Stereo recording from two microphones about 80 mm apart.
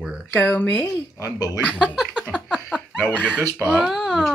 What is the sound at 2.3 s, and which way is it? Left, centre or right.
Laughter, centre.